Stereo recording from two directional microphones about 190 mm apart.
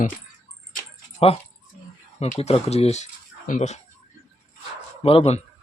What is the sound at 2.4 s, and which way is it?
Speech, 35° left (ahead or behind).